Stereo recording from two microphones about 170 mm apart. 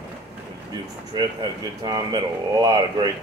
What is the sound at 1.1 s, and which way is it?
Speech, 25° right (ahead or behind).